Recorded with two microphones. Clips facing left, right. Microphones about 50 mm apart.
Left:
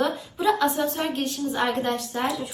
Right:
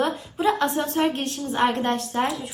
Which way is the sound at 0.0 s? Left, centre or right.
Right.